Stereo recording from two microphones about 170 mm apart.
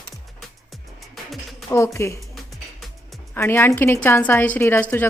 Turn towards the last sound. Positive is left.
turn(degrees=10)  # may be behind; listen again after turning